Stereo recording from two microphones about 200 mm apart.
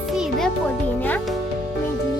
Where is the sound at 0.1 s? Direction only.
Centre (ahead or behind).